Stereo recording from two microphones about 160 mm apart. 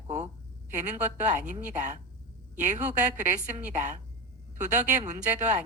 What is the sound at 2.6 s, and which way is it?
Speech, 50° right (ahead or behind).